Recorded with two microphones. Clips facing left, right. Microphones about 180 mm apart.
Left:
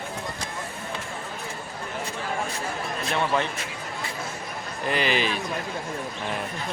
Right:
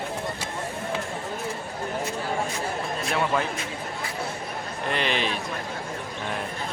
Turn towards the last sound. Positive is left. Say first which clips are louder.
# left 2 dB
turn(degrees=0)  # may be behind; listen again after turning